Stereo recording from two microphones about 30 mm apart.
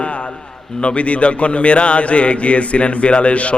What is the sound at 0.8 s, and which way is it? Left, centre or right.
A man's voice, left.